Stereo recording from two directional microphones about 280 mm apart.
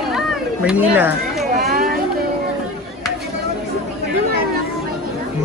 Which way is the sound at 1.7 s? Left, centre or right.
Right.